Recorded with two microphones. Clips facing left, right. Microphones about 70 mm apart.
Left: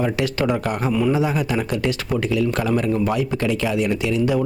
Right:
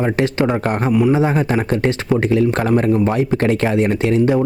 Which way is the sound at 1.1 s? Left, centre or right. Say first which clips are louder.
Right 4 dB; right.